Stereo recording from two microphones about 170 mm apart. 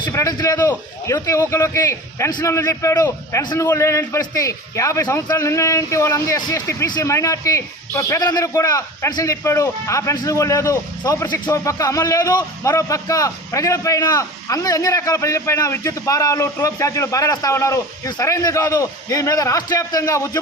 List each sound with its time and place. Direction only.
0.0 s a man's voice: 20° left (ahead or behind)